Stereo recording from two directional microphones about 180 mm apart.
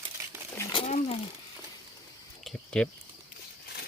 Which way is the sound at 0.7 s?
35° left (ahead or behind).